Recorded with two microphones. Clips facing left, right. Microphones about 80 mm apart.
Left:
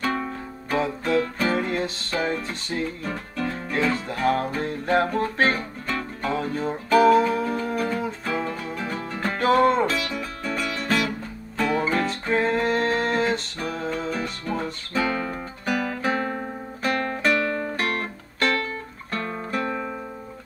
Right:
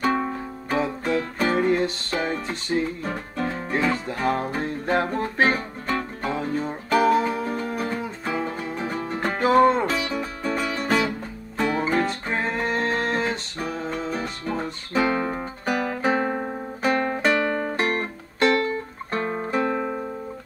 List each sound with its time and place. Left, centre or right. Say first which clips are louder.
0.0 s music: right 3 dB; centre
3.0 s music: right 1 dB; right
3.5 s music: even; centre
9.9 s music: right 2 dB; right; by 14.1 s centre
14.5 s music: right 2 dB; centre
15.9 s guitar: right 3 dB; right
16.8 s music: right 2 dB; right